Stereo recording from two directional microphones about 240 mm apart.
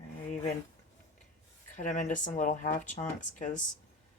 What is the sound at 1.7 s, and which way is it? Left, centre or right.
Speech, left.